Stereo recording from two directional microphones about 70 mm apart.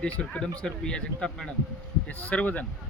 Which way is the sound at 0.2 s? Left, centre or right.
Centre.